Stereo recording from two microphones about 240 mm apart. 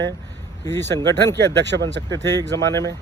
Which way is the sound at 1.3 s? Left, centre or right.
Right.